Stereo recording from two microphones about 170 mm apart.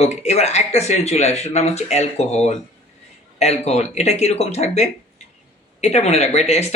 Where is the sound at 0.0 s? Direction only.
40° left (ahead or behind).